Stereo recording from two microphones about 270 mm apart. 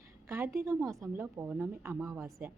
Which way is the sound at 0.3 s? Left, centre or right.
Centre.